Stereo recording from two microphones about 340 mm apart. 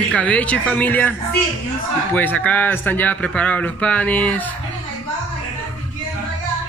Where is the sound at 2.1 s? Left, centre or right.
Centre.